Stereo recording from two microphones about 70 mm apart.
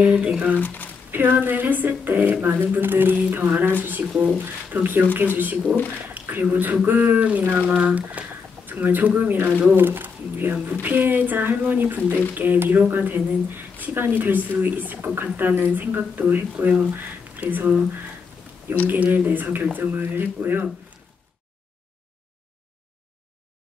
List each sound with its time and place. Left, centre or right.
0.0 s speech: centre
0.6 s speech: left
1.1 s speech: right
6.1 s a sound: right
6.5 s speech: right
18.9 s speech: right